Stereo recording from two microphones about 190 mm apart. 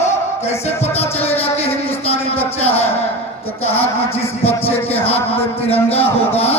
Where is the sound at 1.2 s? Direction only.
30° left (ahead or behind).